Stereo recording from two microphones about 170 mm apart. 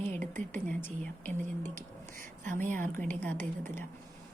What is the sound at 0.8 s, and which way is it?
Speech, 10° left (ahead or behind).